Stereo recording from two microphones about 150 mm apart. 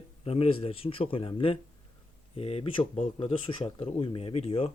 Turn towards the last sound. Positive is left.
turn(degrees=40)  # may be behind; listen again after turning